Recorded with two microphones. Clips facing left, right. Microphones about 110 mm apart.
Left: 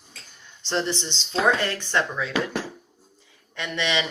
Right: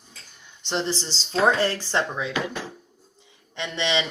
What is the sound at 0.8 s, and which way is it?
Speech, 35° right (ahead or behind).